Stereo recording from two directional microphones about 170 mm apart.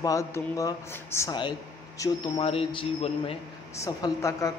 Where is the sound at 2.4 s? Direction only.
35° left (ahead or behind).